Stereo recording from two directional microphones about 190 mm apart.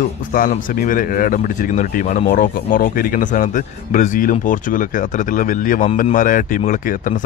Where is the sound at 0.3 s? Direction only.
45° left (ahead or behind).